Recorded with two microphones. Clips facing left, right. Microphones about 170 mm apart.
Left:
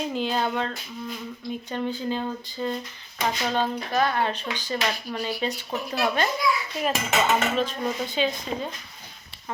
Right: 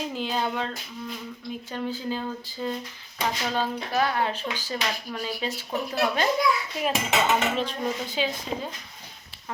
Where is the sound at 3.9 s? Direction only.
10° right (ahead or behind).